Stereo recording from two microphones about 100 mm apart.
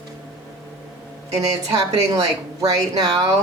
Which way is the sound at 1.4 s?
40° right (ahead or behind).